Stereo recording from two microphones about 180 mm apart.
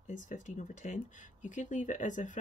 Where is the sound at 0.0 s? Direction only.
45° left (ahead or behind).